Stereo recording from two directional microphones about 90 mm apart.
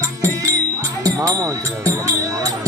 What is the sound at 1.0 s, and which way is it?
Music, 35° right (ahead or behind).